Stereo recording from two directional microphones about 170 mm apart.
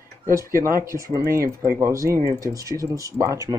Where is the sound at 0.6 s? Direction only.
15° right (ahead or behind).